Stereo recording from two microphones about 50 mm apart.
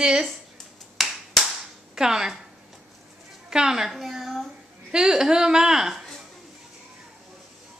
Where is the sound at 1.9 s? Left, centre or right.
Centre.